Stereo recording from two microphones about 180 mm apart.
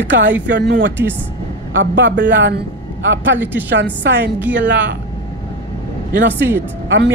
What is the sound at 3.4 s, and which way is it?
Speech, 10° right (ahead or behind).